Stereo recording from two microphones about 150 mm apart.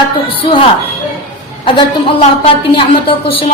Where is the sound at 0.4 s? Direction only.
35° left (ahead or behind).